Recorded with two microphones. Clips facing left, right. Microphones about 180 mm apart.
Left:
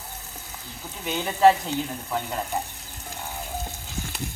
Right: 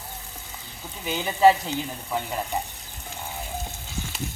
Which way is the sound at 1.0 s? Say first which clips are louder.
Even; 5° right (ahead or behind).